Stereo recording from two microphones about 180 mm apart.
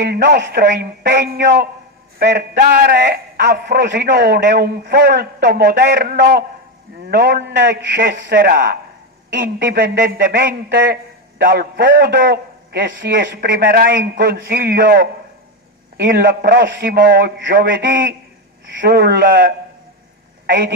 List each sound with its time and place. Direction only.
0.0 s a man's voice: 70° right (ahead or behind)
6.1 s a man's voice: 55° right (ahead or behind)
8.3 s a man's voice: 60° right (ahead or behind); by 17.9 s 75° right (ahead or behind)
18.8 s a man's voice: 65° right (ahead or behind)
20.4 s a man's voice: 75° right (ahead or behind)